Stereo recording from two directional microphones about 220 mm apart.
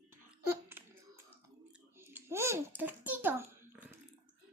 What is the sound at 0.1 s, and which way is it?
Babbling, 10° right (ahead or behind).